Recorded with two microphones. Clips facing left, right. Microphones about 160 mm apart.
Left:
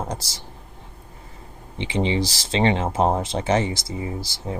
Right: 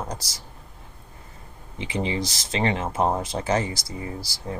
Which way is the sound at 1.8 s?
30° left (ahead or behind).